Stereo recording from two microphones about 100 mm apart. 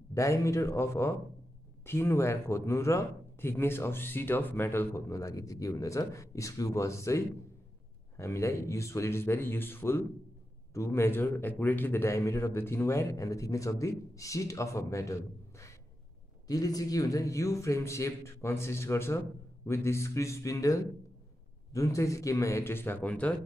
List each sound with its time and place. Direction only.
0.1 s a man's voice: 30° left (ahead or behind); by 23.3 s 10° left (ahead or behind)